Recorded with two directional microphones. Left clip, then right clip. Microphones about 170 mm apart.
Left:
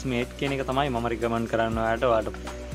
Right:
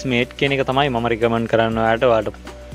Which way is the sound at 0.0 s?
50° right (ahead or behind).